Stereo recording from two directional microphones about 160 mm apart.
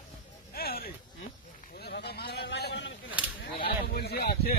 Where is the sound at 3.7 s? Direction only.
75° left (ahead or behind).